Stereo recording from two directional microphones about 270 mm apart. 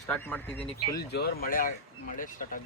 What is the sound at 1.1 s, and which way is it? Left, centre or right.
Speech, left.